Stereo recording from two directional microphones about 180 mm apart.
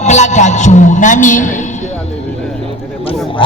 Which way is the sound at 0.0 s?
40° left (ahead or behind).